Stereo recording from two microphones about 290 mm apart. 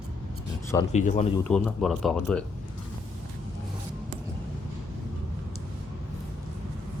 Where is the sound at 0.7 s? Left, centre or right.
Centre.